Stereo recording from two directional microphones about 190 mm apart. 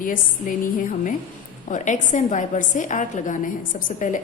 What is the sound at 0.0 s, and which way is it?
A woman's voice, 45° left (ahead or behind).